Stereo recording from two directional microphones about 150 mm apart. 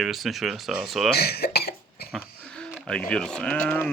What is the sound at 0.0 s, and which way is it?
A man's voice, centre (ahead or behind).